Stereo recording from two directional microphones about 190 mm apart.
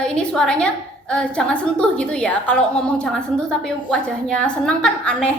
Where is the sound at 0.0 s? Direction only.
5° left (ahead or behind).